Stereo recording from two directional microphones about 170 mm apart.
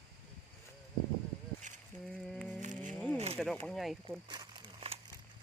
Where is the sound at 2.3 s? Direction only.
5° left (ahead or behind).